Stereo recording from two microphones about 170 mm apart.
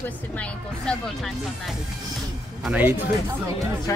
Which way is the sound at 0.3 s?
10° left (ahead or behind).